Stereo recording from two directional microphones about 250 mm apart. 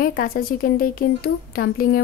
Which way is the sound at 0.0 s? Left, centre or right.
Left.